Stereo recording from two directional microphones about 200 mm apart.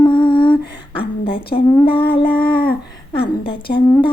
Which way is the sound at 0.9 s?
25° left (ahead or behind).